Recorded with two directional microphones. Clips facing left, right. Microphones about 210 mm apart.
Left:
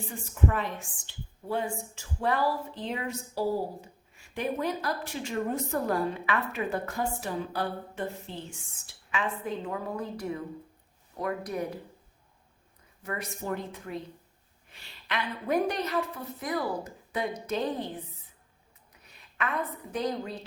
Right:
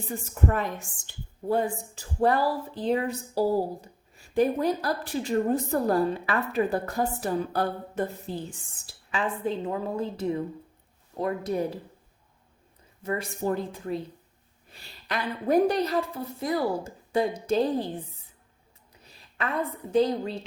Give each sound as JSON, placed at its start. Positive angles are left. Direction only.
{"t": 0.4, "sound": "a woman's voice", "side_deg": -45}
{"t": 13.0, "sound": "a woman's voice", "side_deg": -25}
{"t": 19.1, "sound": "a woman's voice", "side_deg": -30}